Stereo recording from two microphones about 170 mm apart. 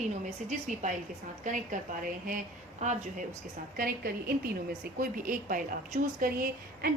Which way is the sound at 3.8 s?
60° right (ahead or behind).